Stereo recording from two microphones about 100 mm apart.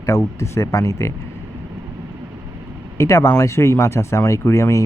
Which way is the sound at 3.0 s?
30° left (ahead or behind).